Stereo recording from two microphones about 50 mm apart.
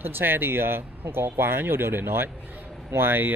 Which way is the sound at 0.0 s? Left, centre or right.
Right.